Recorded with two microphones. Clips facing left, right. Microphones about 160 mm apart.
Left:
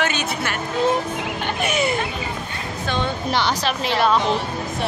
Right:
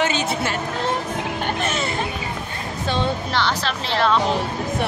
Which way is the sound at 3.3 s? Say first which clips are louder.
Left 1 dB; 15° left (ahead or behind).